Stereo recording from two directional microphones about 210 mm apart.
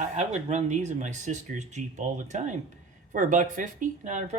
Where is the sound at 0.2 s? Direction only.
30° right (ahead or behind).